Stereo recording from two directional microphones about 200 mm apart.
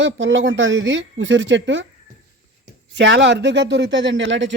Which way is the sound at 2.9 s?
65° right (ahead or behind).